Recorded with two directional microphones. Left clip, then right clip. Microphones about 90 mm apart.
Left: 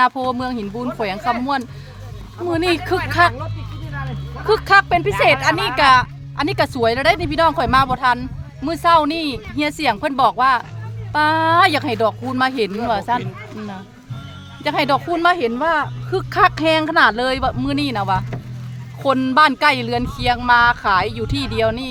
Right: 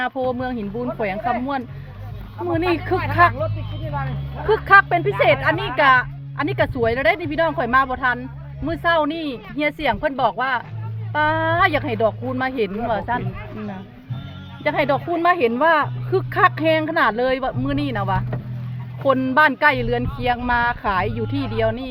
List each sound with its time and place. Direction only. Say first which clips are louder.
0.0 s speech: left 5 dB; 40° left (ahead or behind)
4.4 s speech: even; 25° left (ahead or behind); by 13.2 s 40° left (ahead or behind)
14.6 s speech: left 2 dB; 35° left (ahead or behind)
15.0 s a woman's voice: left 2 dB; 20° left (ahead or behind)
15.4 s a woman's voice: right 2 dB; centre (ahead or behind)
16.3 s speech: left 3 dB; 25° left (ahead or behind)
19.3 s speech: left 3 dB; 35° left (ahead or behind)
20.5 s speech: left 9 dB; 30° left (ahead or behind)